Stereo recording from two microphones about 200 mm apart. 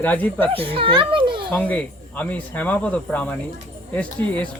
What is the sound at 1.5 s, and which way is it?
Speech, 5° left (ahead or behind).